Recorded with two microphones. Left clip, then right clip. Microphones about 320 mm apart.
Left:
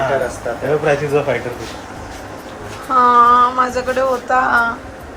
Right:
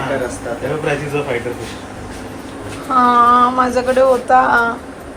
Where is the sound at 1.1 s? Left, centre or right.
Left.